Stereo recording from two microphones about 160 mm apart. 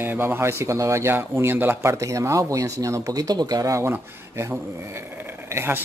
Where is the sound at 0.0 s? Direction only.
15° right (ahead or behind).